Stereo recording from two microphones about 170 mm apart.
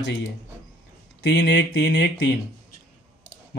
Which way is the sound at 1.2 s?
80° left.